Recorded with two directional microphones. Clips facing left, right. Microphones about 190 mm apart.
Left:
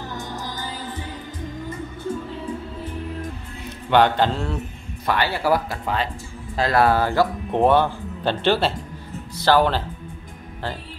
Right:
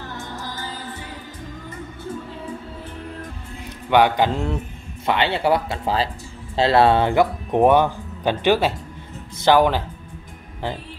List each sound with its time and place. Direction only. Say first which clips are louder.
0.2 s music: left 1 dB; 15° left (ahead or behind)
3.9 s mantra: right 1 dB; 10° right (ahead or behind)
5.0 s speech: right 2 dB; 20° right (ahead or behind)
9.4 s mantra: right 2 dB; 15° right (ahead or behind)